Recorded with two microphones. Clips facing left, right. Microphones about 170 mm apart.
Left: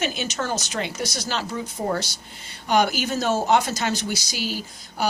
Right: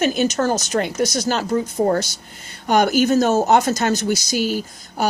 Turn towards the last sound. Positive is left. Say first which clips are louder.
# right 4 dB
turn(degrees=-50)  # may be behind; listen again after turning